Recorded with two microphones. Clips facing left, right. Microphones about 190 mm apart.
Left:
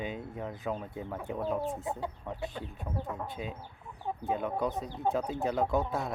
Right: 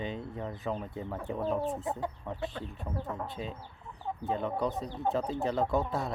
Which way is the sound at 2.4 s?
20° left (ahead or behind).